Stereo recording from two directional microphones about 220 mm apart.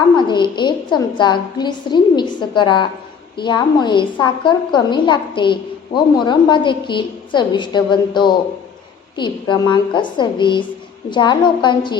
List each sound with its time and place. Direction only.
0.2 s a woman's voice: 20° left (ahead or behind)